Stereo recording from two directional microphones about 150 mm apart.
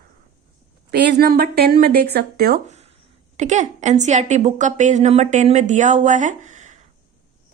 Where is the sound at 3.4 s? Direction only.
50° right (ahead or behind).